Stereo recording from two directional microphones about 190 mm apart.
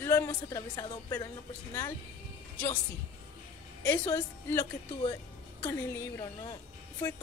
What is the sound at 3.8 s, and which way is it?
Speech, 15° left (ahead or behind).